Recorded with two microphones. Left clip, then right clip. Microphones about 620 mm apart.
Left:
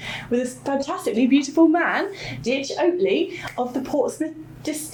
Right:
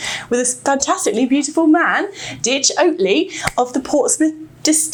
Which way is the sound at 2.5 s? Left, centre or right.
Right.